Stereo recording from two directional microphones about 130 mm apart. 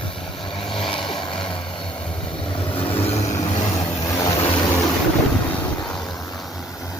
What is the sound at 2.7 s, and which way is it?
Vehicle, 45° left (ahead or behind).